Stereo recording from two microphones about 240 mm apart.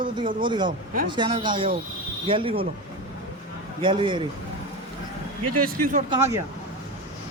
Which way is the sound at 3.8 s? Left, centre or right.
Right.